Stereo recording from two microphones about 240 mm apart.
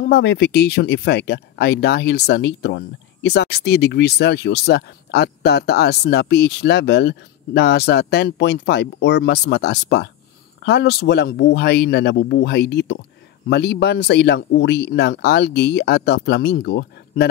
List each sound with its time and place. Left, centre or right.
0.0 s speech: left